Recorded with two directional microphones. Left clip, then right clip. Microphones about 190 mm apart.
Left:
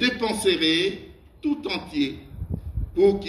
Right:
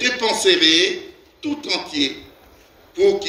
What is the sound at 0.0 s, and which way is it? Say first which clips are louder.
A man's voice: right 5 dB; 50° right (ahead or behind).